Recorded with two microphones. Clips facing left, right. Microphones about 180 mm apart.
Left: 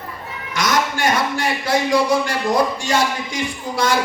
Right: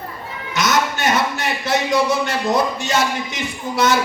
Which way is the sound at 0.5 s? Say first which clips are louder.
Right 1 dB; 25° right (ahead or behind).